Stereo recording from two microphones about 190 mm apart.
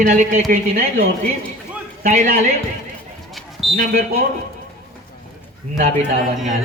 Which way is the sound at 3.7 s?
50° right (ahead or behind).